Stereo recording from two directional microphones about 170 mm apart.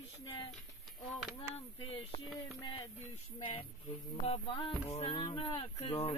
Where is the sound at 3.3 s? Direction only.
30° left (ahead or behind).